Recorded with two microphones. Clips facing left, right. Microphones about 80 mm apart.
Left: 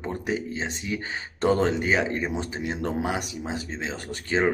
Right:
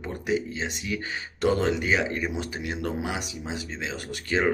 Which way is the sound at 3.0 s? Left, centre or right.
Left.